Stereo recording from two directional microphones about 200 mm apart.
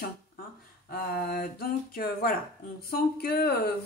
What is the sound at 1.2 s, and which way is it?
Speech, 50° left (ahead or behind).